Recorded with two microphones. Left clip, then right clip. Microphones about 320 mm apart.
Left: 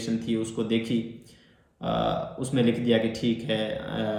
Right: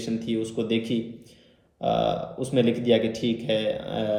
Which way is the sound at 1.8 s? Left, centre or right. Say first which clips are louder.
Right 3 dB; centre.